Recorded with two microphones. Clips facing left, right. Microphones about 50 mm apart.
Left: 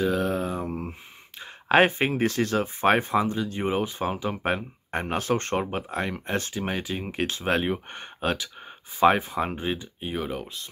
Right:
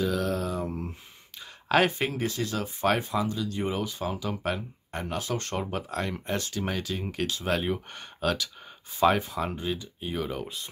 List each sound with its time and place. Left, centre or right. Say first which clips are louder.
0.0 s a sound: left 3 dB; left
2.2 s speech: left 6 dB; left
2.6 s speech: left 2 dB; left
5.7 s speech: left 2 dB; left
6.2 s speech: left 2 dB; left
6.5 s speech: left 2 dB; centre